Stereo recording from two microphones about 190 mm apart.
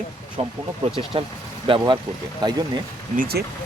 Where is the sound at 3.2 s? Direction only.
55° right (ahead or behind).